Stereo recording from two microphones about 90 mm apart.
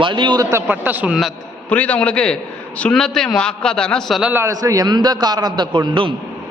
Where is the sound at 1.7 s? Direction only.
15° left (ahead or behind).